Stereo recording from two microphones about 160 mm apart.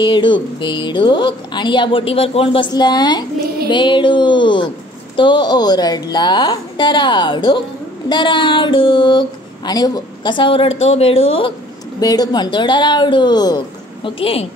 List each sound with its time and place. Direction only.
0.0 s a woman's voice: 30° left (ahead or behind)
12.0 s a woman's voice: 25° left (ahead or behind)